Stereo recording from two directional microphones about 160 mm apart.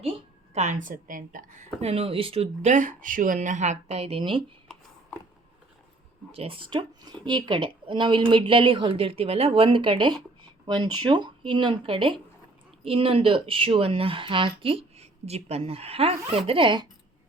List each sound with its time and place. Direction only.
0.5 s a woman's voice: 45° right (ahead or behind)
6.3 s speech: 40° right (ahead or behind)
6.7 s speech: 25° right (ahead or behind)